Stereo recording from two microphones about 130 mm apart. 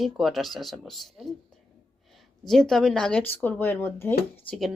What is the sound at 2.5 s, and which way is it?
Speech, 5° left (ahead or behind).